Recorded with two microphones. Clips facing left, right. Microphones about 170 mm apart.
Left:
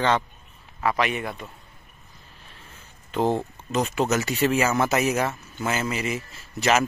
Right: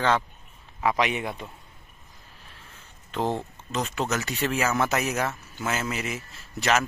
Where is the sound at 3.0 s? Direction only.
5° left (ahead or behind).